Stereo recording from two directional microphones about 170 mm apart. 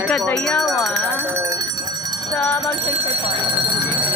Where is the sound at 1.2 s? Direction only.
15° right (ahead or behind).